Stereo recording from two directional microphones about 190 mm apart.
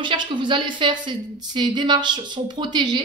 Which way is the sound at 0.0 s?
25° right (ahead or behind).